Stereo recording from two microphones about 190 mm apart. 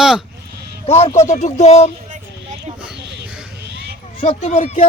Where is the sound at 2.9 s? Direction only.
65° right (ahead or behind).